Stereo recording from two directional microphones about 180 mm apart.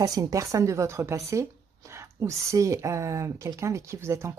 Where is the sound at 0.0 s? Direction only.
20° right (ahead or behind).